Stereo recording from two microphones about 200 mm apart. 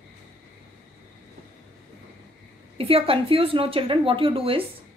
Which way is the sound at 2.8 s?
25° right (ahead or behind).